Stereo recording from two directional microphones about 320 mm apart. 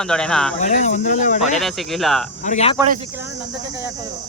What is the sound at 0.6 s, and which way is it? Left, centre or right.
Speech, left.